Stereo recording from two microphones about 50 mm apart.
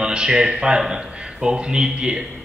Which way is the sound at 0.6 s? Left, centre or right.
Centre.